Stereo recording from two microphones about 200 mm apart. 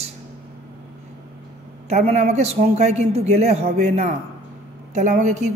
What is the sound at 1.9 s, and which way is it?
Speech, 35° right (ahead or behind).